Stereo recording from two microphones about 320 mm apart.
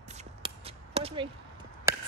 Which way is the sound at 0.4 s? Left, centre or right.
Centre.